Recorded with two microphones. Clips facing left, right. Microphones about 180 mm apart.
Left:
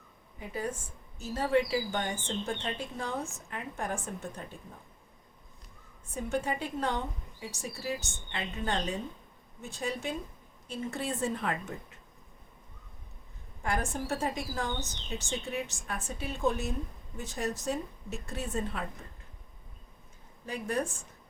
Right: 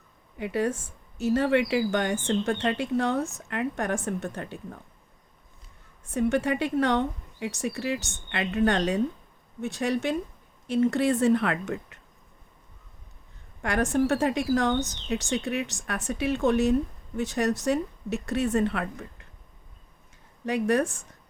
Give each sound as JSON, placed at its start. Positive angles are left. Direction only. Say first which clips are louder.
{"t": 0.3, "sound": "a woman's voice", "louder": "right 9 dB", "side_deg": -75}
{"t": 6.1, "sound": "a woman's voice", "louder": "right 8 dB", "side_deg": -75}
{"t": 13.6, "sound": "a woman's voice", "louder": "right 9 dB", "side_deg": -75}
{"t": 20.4, "sound": "a woman's voice", "louder": "right 9 dB", "side_deg": -75}